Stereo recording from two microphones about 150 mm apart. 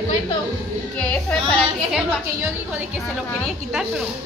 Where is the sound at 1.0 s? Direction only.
5° left (ahead or behind).